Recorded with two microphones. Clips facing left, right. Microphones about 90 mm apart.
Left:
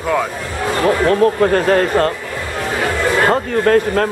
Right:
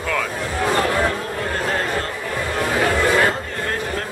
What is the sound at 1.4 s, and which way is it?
Speech, 65° left (ahead or behind).